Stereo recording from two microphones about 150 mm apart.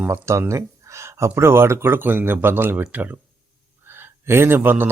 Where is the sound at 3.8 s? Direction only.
15° right (ahead or behind).